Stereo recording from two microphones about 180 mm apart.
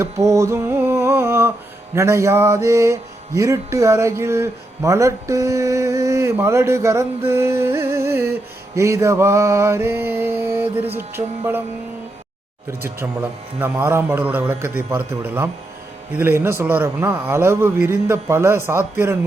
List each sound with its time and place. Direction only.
0.0 s a sound: 15° right (ahead or behind)
2.0 s mantra: 15° right (ahead or behind)
13.6 s mantra: 10° right (ahead or behind)